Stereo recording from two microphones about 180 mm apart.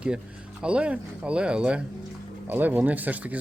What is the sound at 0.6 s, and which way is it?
Speech, 5° right (ahead or behind).